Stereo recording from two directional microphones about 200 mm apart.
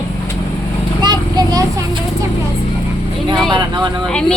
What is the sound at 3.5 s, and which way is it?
Speech, 20° right (ahead or behind).